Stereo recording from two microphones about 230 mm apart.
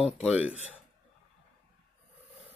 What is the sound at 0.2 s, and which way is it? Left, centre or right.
Speech, centre.